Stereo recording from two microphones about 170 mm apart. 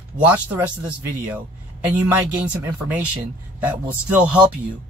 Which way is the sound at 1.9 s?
10° right (ahead or behind).